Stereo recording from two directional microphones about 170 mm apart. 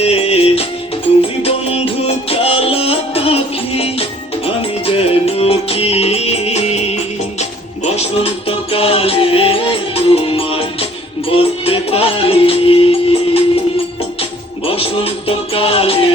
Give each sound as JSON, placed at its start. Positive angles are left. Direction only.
{"t": 0.0, "sound": "music", "side_deg": 35}